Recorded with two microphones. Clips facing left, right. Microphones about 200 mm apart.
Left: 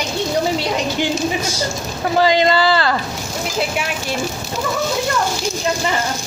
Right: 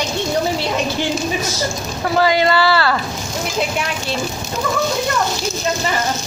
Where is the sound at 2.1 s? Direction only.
20° left (ahead or behind).